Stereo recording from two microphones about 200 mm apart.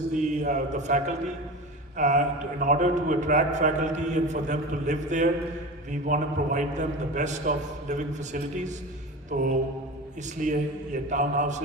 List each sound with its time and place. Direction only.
0.1 s a man's voice: 40° right (ahead or behind)